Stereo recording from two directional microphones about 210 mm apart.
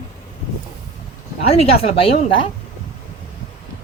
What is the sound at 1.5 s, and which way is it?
Speech, 30° left (ahead or behind).